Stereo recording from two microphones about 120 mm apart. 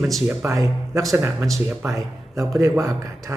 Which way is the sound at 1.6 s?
20° right (ahead or behind).